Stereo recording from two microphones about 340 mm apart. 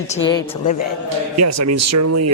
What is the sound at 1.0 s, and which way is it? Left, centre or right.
Speech, right.